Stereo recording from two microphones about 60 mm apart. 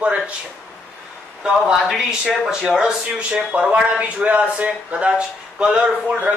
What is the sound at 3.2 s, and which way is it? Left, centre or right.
A man's voice, centre.